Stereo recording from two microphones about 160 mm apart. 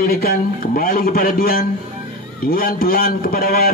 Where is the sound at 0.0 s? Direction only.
70° left (ahead or behind).